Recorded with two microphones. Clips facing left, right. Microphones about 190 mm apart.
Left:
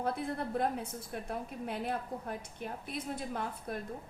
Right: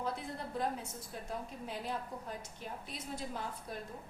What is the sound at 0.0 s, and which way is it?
A woman's voice, 55° left (ahead or behind).